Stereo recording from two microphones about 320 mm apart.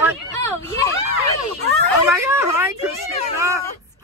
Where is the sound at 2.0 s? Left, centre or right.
Centre.